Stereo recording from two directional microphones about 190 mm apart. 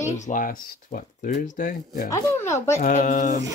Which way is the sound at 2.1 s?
15° left (ahead or behind).